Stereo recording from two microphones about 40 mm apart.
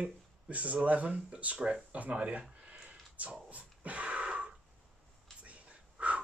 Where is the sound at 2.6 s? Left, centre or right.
Right.